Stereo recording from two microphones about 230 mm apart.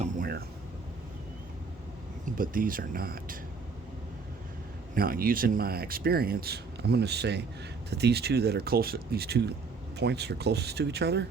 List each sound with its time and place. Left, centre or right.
0.0 s a sound: right
2.2 s speech: right
4.9 s speech: right